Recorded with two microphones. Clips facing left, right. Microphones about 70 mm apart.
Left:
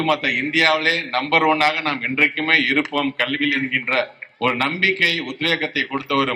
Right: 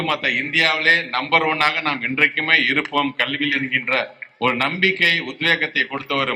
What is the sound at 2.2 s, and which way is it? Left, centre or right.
Speech, right.